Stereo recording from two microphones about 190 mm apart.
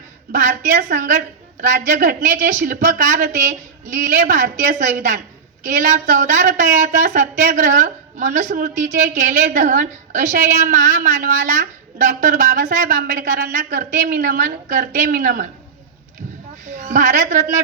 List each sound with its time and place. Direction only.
0.3 s speech: 45° right (ahead or behind)
16.7 s a man's voice: 40° right (ahead or behind)